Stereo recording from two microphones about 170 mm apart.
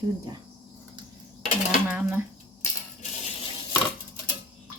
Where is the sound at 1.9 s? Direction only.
10° right (ahead or behind).